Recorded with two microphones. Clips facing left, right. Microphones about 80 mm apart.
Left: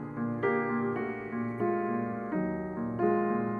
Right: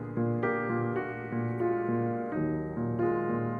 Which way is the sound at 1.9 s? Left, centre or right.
Left.